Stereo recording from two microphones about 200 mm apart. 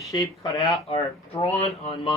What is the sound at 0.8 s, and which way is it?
Speech, 30° left (ahead or behind).